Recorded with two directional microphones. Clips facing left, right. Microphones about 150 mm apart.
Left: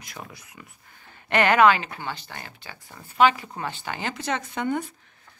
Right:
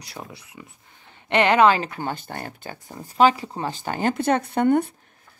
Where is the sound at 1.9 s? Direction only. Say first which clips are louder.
Right 5 dB; 45° right (ahead or behind).